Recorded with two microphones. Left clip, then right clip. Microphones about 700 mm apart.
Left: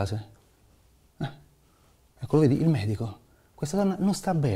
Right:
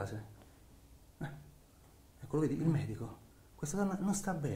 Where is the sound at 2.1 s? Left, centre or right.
Left.